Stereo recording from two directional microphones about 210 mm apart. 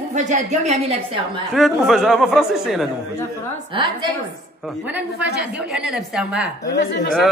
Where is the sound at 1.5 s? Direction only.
Centre (ahead or behind).